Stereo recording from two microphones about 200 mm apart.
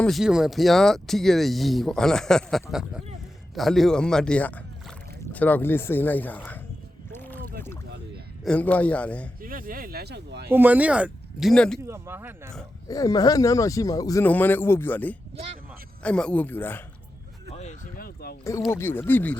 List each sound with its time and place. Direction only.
0.0 s speech: centre (ahead or behind)
7.1 s boat: 10° left (ahead or behind)
8.4 s speech: 5° left (ahead or behind)
9.4 s speech: 45° right (ahead or behind)
10.5 s speech: 10° right (ahead or behind)
11.8 s speech: 15° right (ahead or behind)
12.9 s speech: 20° left (ahead or behind)
17.5 s a sound: 35° left (ahead or behind)
18.7 s speech: 10° left (ahead or behind)